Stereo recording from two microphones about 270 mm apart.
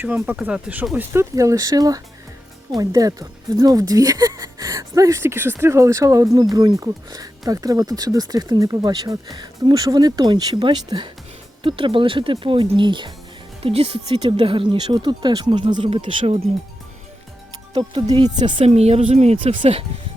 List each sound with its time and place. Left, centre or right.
0.0 s speech: centre
17.7 s speech: centre